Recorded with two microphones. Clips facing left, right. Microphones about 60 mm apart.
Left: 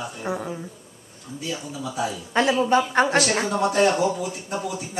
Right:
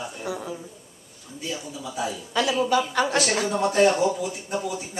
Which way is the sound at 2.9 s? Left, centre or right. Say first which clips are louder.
Left 4 dB; left.